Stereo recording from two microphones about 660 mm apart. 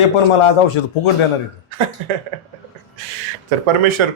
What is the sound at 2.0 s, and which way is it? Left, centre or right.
Speech, right.